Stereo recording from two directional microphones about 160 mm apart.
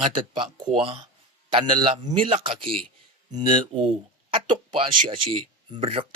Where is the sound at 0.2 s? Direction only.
30° right (ahead or behind).